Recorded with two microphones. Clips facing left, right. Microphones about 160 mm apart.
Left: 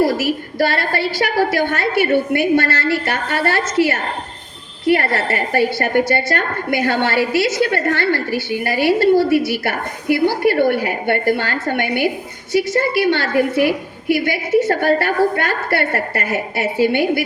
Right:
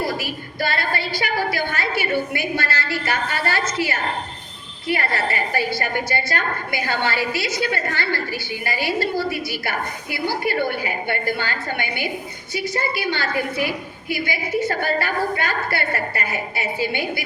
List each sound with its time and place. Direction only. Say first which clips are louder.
0.3 s a woman's voice: left 8 dB; 65° left (ahead or behind)